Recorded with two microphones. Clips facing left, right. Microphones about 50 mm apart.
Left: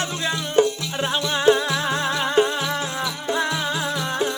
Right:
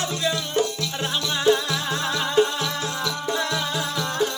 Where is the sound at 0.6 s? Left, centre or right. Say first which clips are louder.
Left 3 dB; centre.